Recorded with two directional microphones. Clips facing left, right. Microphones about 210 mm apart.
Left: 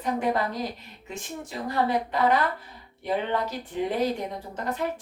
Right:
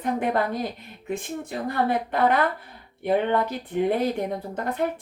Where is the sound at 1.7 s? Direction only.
55° right (ahead or behind).